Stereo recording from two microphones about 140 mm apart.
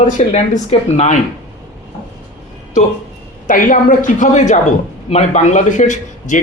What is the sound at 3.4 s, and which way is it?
A man's voice, 70° left (ahead or behind).